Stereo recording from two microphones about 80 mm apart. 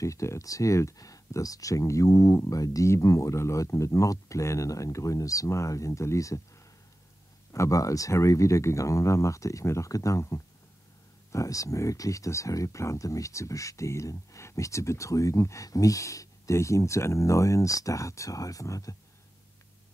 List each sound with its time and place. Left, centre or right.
0.0 s speech: left
7.5 s speech: left